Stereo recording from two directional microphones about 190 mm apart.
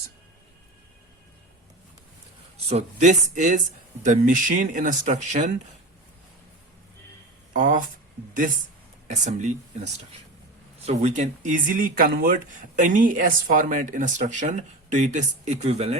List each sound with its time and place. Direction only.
2.6 s speech: 35° right (ahead or behind)
7.5 s speech: 45° right (ahead or behind)
9.0 s speech: 40° right (ahead or behind)